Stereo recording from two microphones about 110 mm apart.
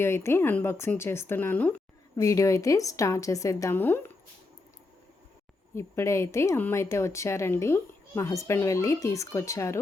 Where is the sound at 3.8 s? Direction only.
20° left (ahead or behind).